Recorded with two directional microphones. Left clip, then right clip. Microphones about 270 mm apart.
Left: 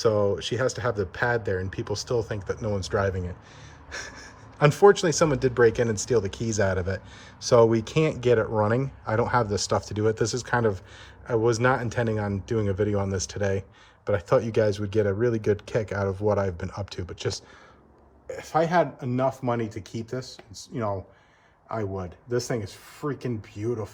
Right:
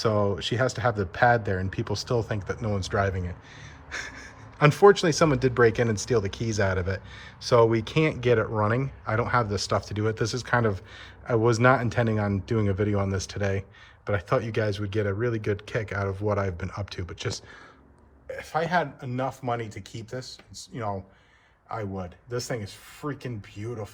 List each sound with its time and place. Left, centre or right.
0.0 s speech: centre
18.4 s speech: left
21.8 s speech: left